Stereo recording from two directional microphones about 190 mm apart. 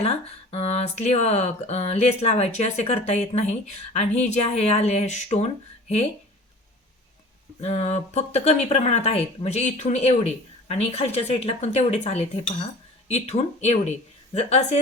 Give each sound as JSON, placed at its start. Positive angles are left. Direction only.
{"t": 0.0, "sound": "speech", "side_deg": 35}
{"t": 7.6, "sound": "speech", "side_deg": 35}